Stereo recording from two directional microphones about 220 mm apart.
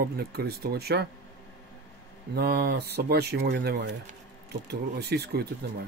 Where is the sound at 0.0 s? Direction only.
45° right (ahead or behind).